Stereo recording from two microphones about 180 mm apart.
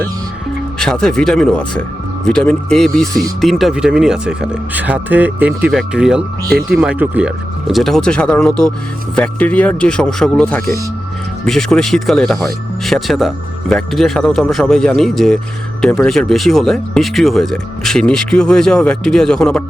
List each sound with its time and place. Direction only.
0.8 s speech: 5° left (ahead or behind)